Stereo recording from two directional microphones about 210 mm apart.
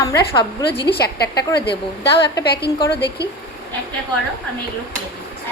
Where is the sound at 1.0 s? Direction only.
50° left (ahead or behind).